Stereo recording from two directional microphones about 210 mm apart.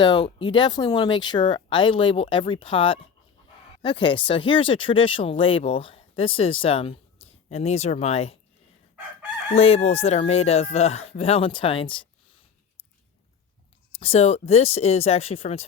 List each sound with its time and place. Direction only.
0.0 s speech: 20° left (ahead or behind)
7.2 s a sound: 30° left (ahead or behind)
7.5 s speech: 30° left (ahead or behind)
9.6 s speech: 30° left (ahead or behind)
14.0 s speech: 30° left (ahead or behind)